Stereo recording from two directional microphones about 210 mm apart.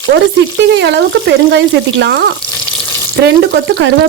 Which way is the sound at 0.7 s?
55° right (ahead or behind).